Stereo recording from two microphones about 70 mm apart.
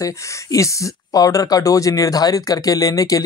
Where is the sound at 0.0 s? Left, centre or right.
Left.